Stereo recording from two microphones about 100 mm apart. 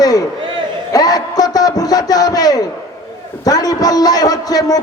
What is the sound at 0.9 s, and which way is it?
A man's voice, 40° left (ahead or behind).